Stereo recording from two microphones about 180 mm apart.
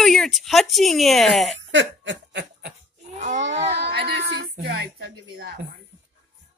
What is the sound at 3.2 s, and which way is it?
Speech, 40° right (ahead or behind).